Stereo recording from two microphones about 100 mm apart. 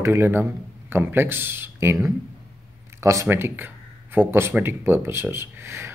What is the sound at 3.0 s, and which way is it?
Speech, 30° right (ahead or behind).